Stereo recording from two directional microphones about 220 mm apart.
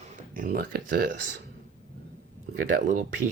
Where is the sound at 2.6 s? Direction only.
40° right (ahead or behind).